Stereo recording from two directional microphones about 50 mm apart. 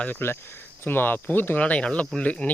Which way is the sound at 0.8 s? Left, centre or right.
Left.